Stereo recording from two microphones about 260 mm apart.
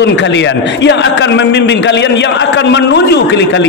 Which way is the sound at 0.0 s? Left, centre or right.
Left.